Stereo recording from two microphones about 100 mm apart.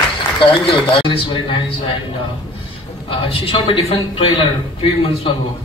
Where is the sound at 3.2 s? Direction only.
65° left (ahead or behind).